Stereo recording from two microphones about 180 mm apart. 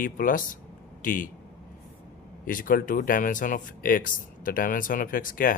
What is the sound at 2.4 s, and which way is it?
Speech, 50° left (ahead or behind).